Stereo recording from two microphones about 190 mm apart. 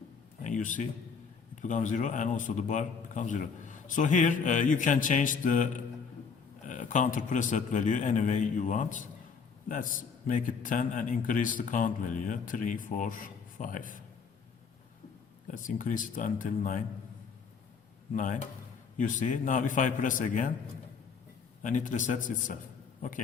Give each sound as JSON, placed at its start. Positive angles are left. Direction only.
{"t": 0.4, "sound": "a man's voice", "side_deg": 40}
{"t": 15.4, "sound": "a man's voice", "side_deg": 45}
{"t": 18.1, "sound": "a man's voice", "side_deg": 40}
{"t": 21.6, "sound": "speech", "side_deg": 40}